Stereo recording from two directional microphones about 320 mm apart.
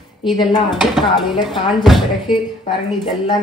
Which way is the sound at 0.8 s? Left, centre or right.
Centre.